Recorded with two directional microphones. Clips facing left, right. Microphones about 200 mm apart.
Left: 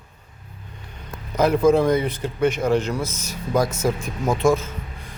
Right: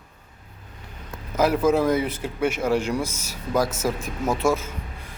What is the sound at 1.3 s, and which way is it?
A man's voice, 5° right (ahead or behind).